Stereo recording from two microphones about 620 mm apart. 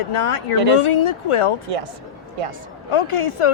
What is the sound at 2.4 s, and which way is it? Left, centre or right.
Speech, right.